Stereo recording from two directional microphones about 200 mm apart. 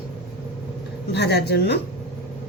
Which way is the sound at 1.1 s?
55° left (ahead or behind).